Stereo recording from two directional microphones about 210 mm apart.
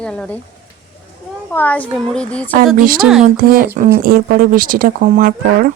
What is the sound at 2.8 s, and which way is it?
Speech, 45° right (ahead or behind).